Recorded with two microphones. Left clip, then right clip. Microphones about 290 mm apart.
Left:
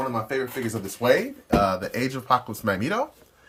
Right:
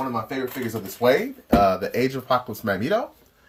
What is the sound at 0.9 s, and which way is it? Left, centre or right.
Speech, centre.